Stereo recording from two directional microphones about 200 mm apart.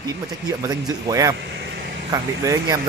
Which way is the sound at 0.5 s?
20° right (ahead or behind).